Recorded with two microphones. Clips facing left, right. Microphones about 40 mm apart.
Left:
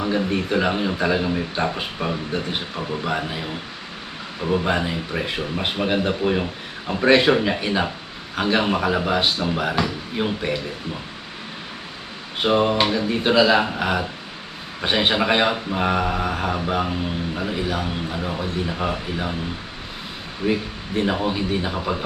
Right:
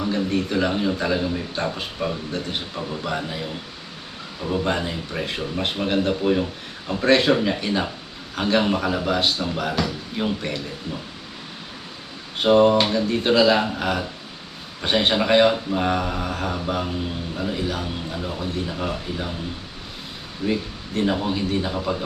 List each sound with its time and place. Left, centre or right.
0.0 s speech: left
4.5 s speech: centre
12.4 s speech: centre
20.5 s speech: centre